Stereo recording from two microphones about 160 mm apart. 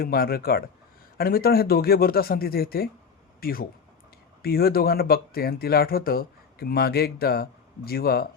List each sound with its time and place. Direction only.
0.0 s speech: 70° left (ahead or behind)